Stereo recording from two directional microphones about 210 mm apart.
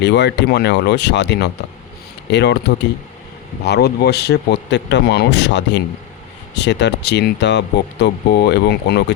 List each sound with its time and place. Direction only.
0.0 s speech: 55° left (ahead or behind)